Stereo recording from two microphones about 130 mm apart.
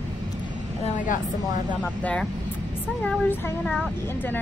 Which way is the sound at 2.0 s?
5° left (ahead or behind).